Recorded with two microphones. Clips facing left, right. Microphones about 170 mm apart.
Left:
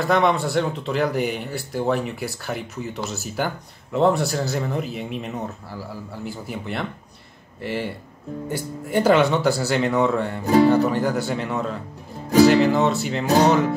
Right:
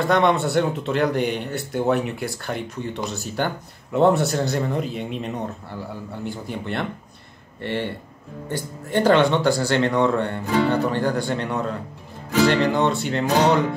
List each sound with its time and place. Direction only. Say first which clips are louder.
0.0 s speech: right 1 dB; centre (ahead or behind)
10.4 s speech: left 8 dB; 40° left (ahead or behind)
10.7 s speech: left 2 dB; 5° left (ahead or behind)